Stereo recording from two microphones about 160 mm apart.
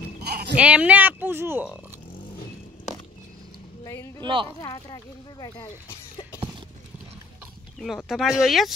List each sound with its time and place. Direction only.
0.3 s horse: 85° right
0.6 s speech: 10° right (ahead or behind)
3.8 s speech: 20° left (ahead or behind)
4.2 s speech: 30° right (ahead or behind)
4.6 s speech: 25° left (ahead or behind)
7.8 s speech: centre (ahead or behind)